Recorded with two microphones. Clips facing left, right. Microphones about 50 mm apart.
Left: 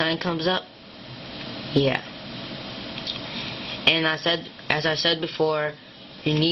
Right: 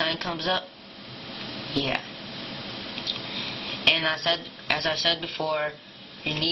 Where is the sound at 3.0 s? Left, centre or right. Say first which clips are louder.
Right 1 dB; centre.